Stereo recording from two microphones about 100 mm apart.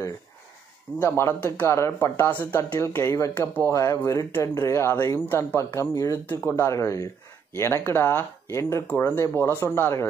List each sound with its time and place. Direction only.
0.9 s speech: 25° left (ahead or behind)